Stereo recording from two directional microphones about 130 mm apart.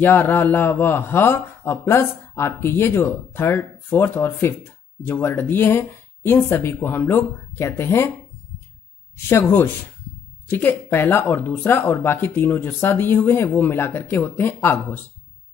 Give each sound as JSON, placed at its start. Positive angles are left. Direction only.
{"t": 0.0, "sound": "a man's voice", "side_deg": 15}
{"t": 9.3, "sound": "a man's voice", "side_deg": 15}